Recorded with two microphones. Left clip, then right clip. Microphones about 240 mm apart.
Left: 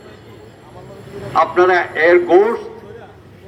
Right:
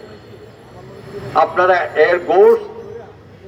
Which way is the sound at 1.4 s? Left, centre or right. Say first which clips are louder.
Even; left.